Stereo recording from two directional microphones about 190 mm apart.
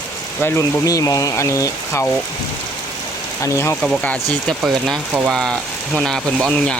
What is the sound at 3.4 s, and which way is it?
Speech, 15° left (ahead or behind).